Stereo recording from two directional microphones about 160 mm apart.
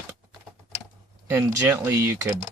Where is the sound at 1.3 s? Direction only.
15° right (ahead or behind).